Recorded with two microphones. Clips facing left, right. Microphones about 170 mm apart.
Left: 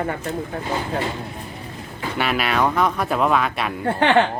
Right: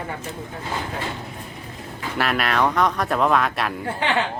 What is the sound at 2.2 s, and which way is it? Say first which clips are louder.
A man's voice: left 1 dB; centre (ahead or behind).